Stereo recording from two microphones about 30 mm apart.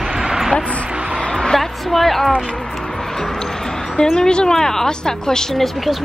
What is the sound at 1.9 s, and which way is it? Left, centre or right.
Speech, centre.